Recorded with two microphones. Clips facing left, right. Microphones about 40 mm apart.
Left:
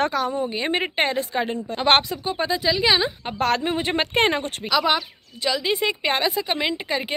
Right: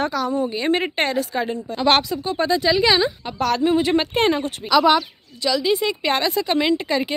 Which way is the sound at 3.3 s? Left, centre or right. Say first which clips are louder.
Right 2 dB; left.